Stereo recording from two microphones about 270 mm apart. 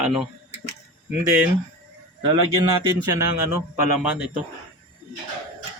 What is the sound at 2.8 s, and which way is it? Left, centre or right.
Speech, centre.